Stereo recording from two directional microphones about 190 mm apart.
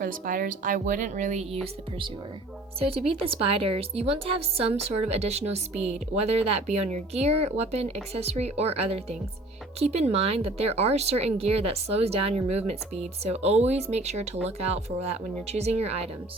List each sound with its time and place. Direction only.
0.0 s speech: 45° right (ahead or behind)
2.7 s speech: 30° right (ahead or behind)